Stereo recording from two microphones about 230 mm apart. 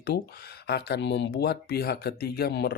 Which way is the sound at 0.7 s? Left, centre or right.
Left.